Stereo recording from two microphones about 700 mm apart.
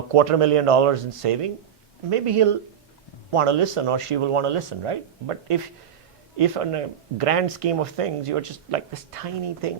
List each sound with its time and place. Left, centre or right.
0.1 s speech: right